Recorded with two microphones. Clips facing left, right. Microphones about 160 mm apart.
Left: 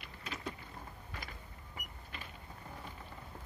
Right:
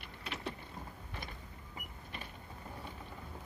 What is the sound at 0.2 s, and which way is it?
Power windows, 30° right (ahead or behind).